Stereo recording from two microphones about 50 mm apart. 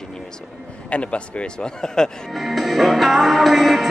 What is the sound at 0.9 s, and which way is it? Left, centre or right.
A man's voice, left.